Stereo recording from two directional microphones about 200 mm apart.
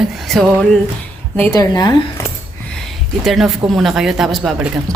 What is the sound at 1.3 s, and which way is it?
Speech, 15° left (ahead or behind).